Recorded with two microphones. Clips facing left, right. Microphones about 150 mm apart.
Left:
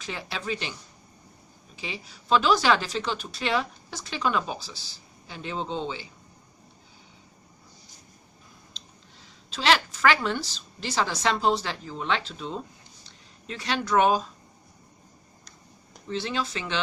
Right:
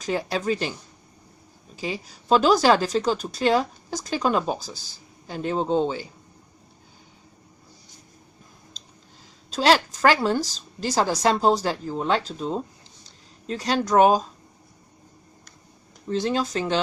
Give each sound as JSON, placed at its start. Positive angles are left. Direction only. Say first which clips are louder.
{"t": 0.0, "sound": "speech", "louder": "right 9 dB", "side_deg": -40}
{"t": 9.5, "sound": "speech", "louder": "right 4 dB", "side_deg": -40}
{"t": 16.0, "sound": "speech", "louder": "right 6 dB", "side_deg": -45}